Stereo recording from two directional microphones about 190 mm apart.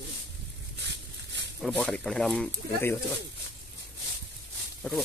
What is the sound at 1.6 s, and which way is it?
Speech, 5° left (ahead or behind).